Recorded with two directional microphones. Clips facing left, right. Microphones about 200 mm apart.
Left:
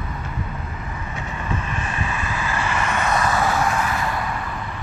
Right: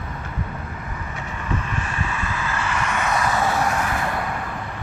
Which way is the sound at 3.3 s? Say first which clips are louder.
Left 1 dB; 25° right (ahead or behind).